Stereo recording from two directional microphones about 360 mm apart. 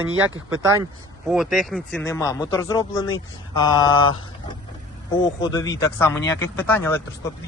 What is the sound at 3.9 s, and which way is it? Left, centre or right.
Speech, left.